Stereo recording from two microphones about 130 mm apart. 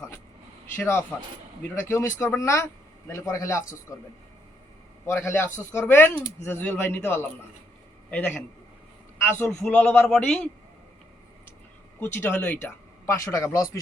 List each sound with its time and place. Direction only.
0.8 s speech: 20° left (ahead or behind)
11.9 s speech: 15° left (ahead or behind)